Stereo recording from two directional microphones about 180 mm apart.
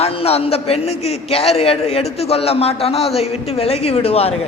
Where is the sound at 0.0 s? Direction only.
35° left (ahead or behind).